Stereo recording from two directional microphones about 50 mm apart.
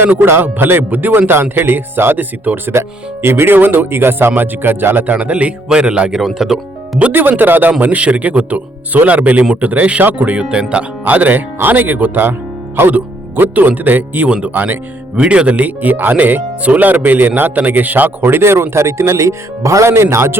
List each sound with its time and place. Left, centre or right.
0.3 s speech: right
2.7 s speech: right
5.1 s speech: right
5.6 s speech: centre
6.1 s speech: centre
7.1 s speech: right
7.7 s speech: right
11.0 s speech: right
15.1 s speech: right